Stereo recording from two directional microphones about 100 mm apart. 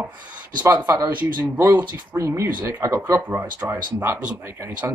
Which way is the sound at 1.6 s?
25° right (ahead or behind).